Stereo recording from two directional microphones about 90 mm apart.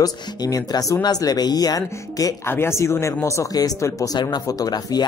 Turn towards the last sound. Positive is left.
turn(degrees=45)  # may be behind; listen again after turning